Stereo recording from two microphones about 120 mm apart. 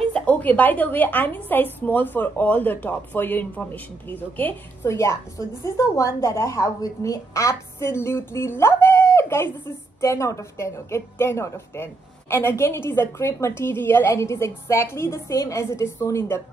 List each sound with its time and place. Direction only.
0.1 s a woman's voice: 10° left (ahead or behind)